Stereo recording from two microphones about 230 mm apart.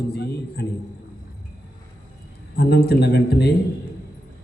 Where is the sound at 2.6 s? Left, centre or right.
Left.